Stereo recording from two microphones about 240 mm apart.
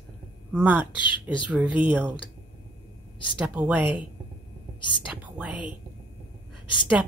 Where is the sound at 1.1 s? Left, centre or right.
Centre.